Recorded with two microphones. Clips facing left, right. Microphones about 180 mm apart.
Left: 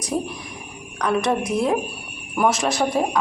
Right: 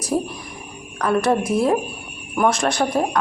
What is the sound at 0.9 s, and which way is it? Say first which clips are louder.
Speech: right 2 dB; 5° right (ahead or behind).